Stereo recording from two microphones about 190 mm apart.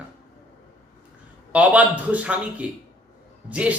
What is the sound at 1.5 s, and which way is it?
Speech, 5° right (ahead or behind).